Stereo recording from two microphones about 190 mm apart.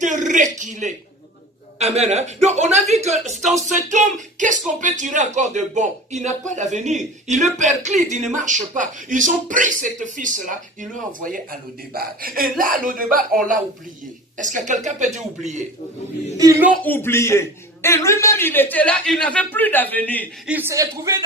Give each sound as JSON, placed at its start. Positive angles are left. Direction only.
{"t": 0.0, "sound": "a sound", "side_deg": -40}
{"t": 1.8, "sound": "speech", "side_deg": -35}
{"t": 16.4, "sound": "a man's voice", "side_deg": -15}
{"t": 16.8, "sound": "a man's voice", "side_deg": 10}
{"t": 20.5, "sound": "a man's voice", "side_deg": -10}